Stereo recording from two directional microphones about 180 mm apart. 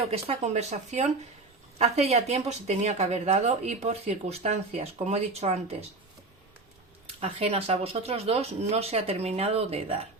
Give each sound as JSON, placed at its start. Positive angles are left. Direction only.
{"t": 0.1, "sound": "speech", "side_deg": -35}
{"t": 7.2, "sound": "speech", "side_deg": -35}